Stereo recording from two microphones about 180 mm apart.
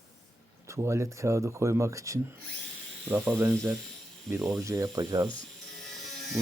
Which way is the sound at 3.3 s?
15° right (ahead or behind).